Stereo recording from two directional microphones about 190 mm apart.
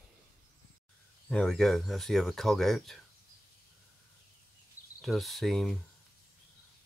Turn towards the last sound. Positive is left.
turn(degrees=0)  # may be behind; listen again after turning